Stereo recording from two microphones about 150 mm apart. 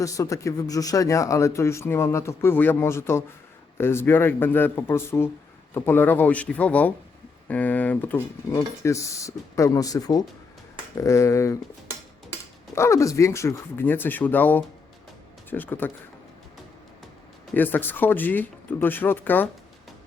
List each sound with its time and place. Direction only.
0.0 s a man's voice: 20° left (ahead or behind)
12.7 s speech: 20° left (ahead or behind)
17.5 s speech: 15° left (ahead or behind)